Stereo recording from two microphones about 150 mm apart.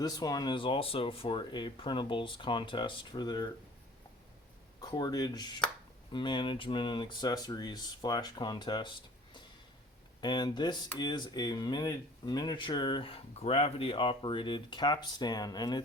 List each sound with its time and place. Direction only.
0.0 s speech: 25° left (ahead or behind)
4.8 s speech: 25° left (ahead or behind)